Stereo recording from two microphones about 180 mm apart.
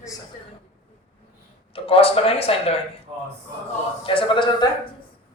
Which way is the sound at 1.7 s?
30° left (ahead or behind).